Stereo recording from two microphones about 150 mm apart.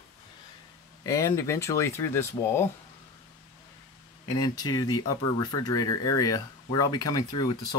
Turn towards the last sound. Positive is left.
turn(degrees=25)  # may be behind; listen again after turning